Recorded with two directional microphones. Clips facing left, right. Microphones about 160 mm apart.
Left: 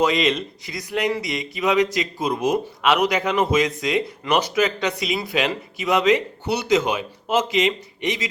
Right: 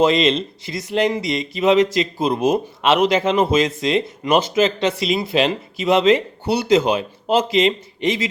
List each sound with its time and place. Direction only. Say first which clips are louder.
0.0 s speech: right 4 dB; 25° right (ahead or behind)